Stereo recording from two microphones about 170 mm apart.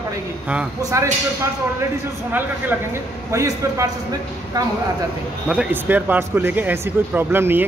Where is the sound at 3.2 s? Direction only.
15° right (ahead or behind).